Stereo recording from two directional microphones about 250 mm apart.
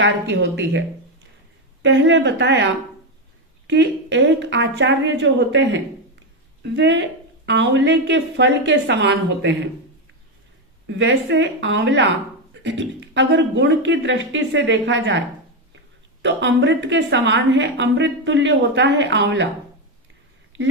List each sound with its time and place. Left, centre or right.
0.0 s a woman's voice: right
10.8 s a woman's voice: right
16.2 s a woman's voice: right